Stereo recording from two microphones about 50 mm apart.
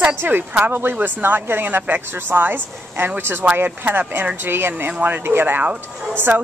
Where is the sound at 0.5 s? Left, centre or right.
Right.